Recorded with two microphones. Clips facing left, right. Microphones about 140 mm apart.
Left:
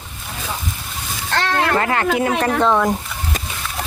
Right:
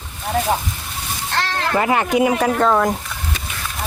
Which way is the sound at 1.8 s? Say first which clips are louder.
Right 2 dB; 15° right (ahead or behind).